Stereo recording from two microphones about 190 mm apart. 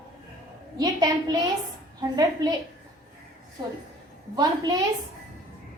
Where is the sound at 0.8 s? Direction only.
20° right (ahead or behind).